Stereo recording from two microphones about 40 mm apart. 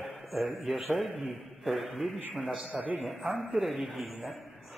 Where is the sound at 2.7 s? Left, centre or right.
Right.